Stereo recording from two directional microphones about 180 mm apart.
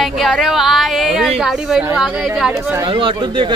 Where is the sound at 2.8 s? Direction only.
30° right (ahead or behind).